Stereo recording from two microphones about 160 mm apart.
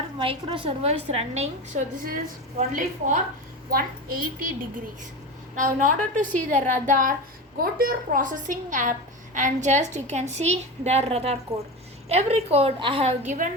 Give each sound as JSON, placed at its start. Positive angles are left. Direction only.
{"t": 0.2, "sound": "a woman's voice", "side_deg": -30}
{"t": 2.0, "sound": "a woman's voice", "side_deg": -60}
{"t": 3.7, "sound": "a woman's voice", "side_deg": -65}